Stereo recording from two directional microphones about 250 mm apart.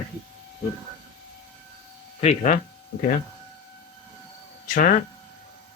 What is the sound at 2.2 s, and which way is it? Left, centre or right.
Speech, left.